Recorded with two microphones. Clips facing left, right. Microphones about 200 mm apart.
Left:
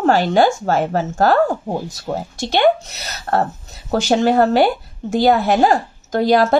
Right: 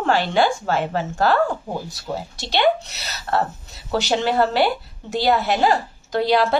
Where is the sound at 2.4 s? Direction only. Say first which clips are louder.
Left 4 dB; 50° left (ahead or behind).